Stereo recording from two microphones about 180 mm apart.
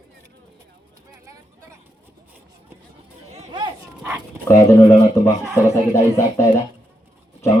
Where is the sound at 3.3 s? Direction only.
40° right (ahead or behind).